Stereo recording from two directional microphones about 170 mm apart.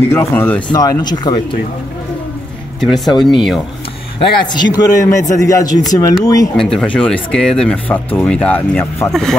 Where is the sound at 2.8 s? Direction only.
Centre (ahead or behind).